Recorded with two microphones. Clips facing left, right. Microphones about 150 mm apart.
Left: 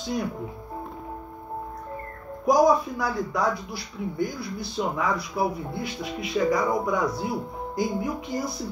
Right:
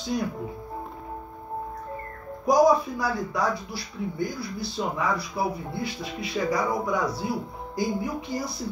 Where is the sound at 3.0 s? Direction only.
20° left (ahead or behind).